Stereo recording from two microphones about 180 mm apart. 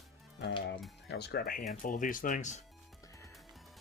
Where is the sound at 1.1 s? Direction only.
65° left (ahead or behind); by 2.6 s 40° left (ahead or behind).